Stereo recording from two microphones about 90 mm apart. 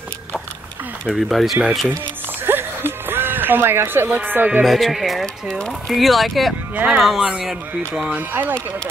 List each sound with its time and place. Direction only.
1.0 s speech: centre (ahead or behind)
2.4 s music: 25° right (ahead or behind)
4.6 s speech: centre (ahead or behind)
6.7 s speech: 15° right (ahead or behind)
7.0 s speech: 5° right (ahead or behind); by 8.5 s 20° right (ahead or behind)